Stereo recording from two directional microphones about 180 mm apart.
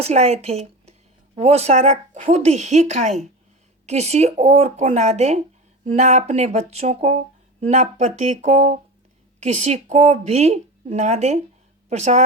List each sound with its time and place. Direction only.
0.0 s speech: 35° right (ahead or behind)